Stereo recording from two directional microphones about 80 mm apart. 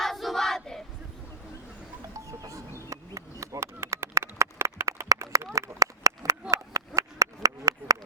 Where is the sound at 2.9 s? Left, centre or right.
Right.